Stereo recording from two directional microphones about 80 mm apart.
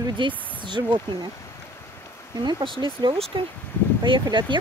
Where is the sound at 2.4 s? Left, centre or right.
Right.